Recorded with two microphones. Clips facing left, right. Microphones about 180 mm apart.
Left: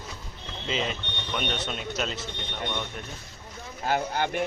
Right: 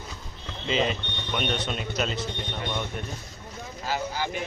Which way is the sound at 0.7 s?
Centre (ahead or behind).